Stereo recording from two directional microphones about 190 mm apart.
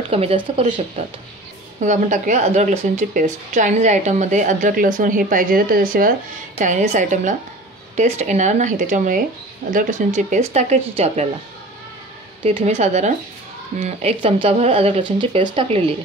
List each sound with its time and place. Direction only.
0.1 s a woman's voice: 30° right (ahead or behind)
12.4 s speech: 35° right (ahead or behind)